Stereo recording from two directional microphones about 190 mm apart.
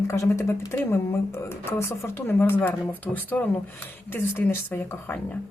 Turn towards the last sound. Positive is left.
turn(degrees=10)  # may be behind; listen again after turning